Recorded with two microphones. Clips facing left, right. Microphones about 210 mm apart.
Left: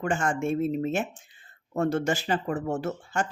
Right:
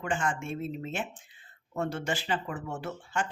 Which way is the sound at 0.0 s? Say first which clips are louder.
Left 5 dB; 45° left (ahead or behind).